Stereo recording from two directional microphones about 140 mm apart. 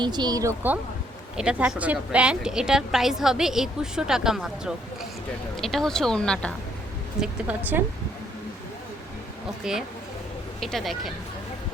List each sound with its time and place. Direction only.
0.0 s speech: 30° right (ahead or behind)
1.4 s a woman's voice: 5° right (ahead or behind)
7.2 s speech: 10° right (ahead or behind)
9.7 s a woman's voice: 5° right (ahead or behind)